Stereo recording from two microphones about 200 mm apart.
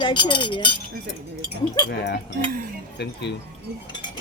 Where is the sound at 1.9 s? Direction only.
55° left (ahead or behind).